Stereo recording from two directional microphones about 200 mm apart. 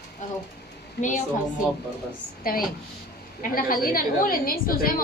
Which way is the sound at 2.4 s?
45° left (ahead or behind).